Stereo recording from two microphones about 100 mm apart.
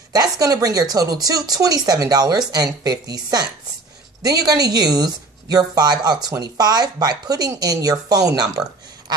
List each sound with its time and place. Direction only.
0.1 s a woman's voice: 35° right (ahead or behind)